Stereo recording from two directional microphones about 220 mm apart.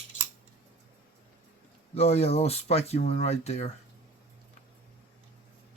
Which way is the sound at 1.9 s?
25° left (ahead or behind).